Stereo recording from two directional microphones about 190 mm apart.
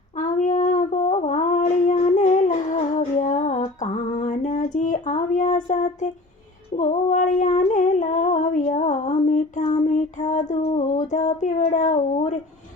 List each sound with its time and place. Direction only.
0.2 s female singing: 40° left (ahead or behind)